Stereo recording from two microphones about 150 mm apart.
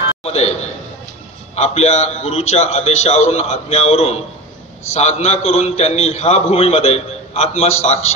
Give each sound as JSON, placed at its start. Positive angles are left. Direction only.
{"t": 0.2, "sound": "a man's voice", "side_deg": 45}